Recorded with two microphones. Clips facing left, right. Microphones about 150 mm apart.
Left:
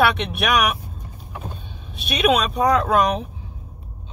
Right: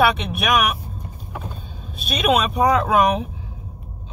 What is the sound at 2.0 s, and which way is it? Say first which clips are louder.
Speech: even; centre (ahead or behind).